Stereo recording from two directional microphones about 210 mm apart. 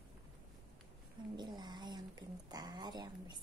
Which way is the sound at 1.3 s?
20° right (ahead or behind).